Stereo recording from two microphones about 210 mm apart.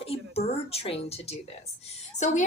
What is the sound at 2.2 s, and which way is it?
Speech, 35° left (ahead or behind).